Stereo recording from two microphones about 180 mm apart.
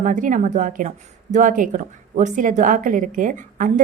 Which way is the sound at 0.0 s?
45° right (ahead or behind).